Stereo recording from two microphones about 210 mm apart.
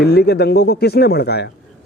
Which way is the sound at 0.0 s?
50° left (ahead or behind).